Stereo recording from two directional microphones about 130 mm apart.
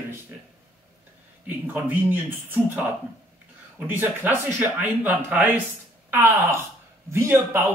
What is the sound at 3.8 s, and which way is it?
A man's voice, 15° right (ahead or behind).